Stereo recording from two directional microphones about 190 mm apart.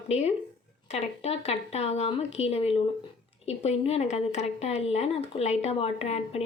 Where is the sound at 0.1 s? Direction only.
35° left (ahead or behind).